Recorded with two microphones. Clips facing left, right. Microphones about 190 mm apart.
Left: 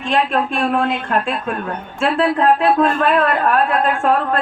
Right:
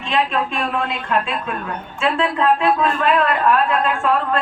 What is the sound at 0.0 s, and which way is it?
A woman's voice, 50° left (ahead or behind).